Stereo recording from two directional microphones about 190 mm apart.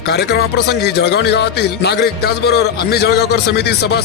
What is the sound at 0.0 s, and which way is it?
Speech, 60° left (ahead or behind).